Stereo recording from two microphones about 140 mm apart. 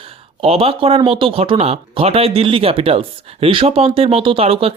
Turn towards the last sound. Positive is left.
turn(degrees=-45)  # may be behind; listen again after turning